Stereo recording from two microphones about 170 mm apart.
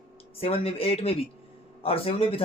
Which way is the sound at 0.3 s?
35° left (ahead or behind).